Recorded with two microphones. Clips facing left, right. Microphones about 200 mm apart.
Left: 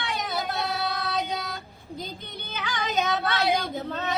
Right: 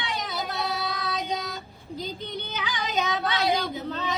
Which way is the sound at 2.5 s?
55° left (ahead or behind).